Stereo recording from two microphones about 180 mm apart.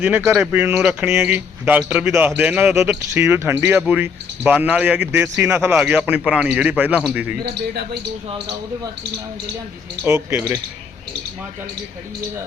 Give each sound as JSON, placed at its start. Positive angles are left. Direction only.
{"t": 0.3, "sound": "speech", "side_deg": -10}
{"t": 7.4, "sound": "speech", "side_deg": -60}
{"t": 10.0, "sound": "speech", "side_deg": -15}